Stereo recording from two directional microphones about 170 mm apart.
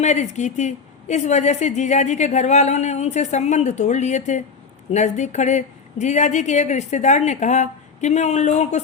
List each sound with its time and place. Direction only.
0.0 s a woman's voice: 45° left (ahead or behind)